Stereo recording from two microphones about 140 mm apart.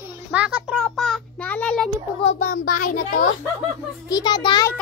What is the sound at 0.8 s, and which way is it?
Child singing, 5° left (ahead or behind).